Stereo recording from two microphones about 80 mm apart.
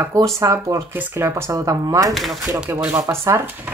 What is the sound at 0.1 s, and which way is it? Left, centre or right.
Speech, right.